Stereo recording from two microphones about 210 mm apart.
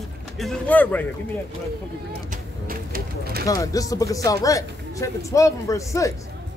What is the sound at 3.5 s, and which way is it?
Speech, 15° left (ahead or behind).